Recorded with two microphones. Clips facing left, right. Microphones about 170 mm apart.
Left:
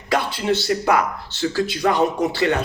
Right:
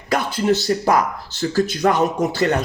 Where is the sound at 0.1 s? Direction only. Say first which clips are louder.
Right 2 dB; 45° right (ahead or behind).